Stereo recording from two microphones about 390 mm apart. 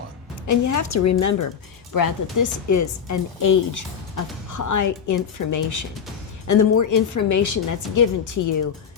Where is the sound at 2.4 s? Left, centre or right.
Left.